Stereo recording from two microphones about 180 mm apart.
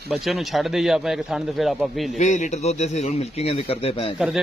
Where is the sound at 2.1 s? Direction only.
40° left (ahead or behind).